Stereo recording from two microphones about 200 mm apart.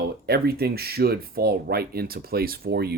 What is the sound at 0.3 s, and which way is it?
Speech, 50° right (ahead or behind).